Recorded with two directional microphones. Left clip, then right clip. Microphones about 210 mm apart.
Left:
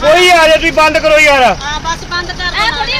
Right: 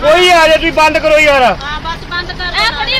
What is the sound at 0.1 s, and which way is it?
A man's voice, centre (ahead or behind).